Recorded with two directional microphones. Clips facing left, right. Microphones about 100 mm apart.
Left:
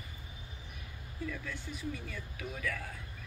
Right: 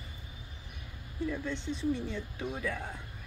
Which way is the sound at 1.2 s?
25° right (ahead or behind).